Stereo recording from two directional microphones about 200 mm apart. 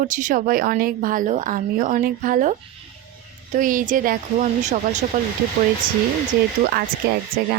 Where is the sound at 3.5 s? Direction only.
40° right (ahead or behind).